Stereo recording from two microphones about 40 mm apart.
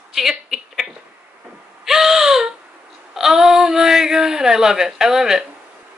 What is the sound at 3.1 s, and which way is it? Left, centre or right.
A woman's voice, centre.